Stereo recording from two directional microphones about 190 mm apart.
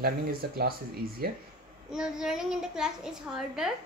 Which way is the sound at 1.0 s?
50° right (ahead or behind).